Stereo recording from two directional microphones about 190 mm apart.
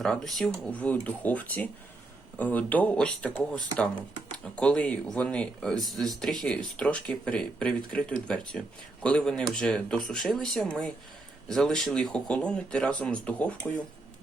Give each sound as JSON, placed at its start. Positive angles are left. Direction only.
{"t": 0.0, "sound": "speech", "side_deg": 0}